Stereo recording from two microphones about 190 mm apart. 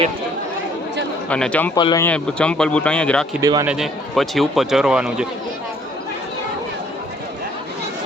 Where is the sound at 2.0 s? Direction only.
5° left (ahead or behind).